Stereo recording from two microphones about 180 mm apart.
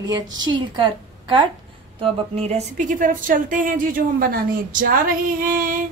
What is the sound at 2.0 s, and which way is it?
Speech, 35° right (ahead or behind).